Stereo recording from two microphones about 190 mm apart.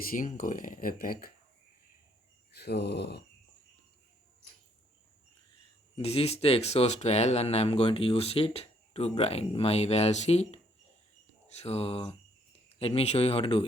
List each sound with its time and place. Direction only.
0.1 s speech: 45° left (ahead or behind)
2.6 s speech: 60° left (ahead or behind)
6.0 s speech: 30° left (ahead or behind)